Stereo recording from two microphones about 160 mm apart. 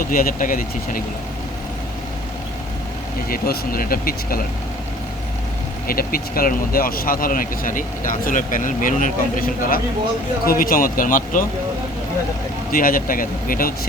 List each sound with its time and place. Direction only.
0.0 s speech: 65° left (ahead or behind)
3.2 s speech: 70° left (ahead or behind)
5.9 s speech: 65° left (ahead or behind)
12.7 s speech: 60° left (ahead or behind)